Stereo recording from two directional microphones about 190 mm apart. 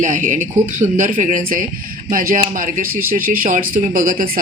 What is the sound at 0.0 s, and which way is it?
A woman's voice, 45° right (ahead or behind).